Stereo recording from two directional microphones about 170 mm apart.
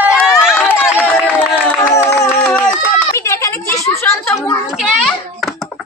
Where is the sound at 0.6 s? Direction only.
10° left (ahead or behind).